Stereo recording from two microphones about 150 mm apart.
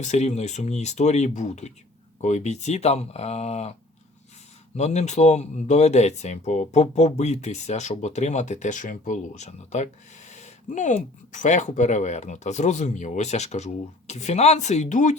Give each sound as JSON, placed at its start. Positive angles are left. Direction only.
{"t": 0.0, "sound": "speech", "side_deg": 50}
{"t": 4.8, "sound": "speech", "side_deg": 50}